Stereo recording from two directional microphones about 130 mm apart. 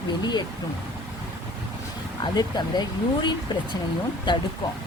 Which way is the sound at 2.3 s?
35° left (ahead or behind).